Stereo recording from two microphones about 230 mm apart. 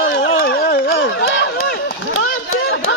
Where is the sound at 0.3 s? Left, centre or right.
Left.